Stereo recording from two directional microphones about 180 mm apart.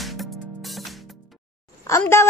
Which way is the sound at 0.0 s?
Centre (ahead or behind).